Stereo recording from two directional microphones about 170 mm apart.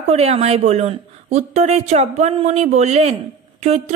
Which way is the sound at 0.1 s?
40° right (ahead or behind).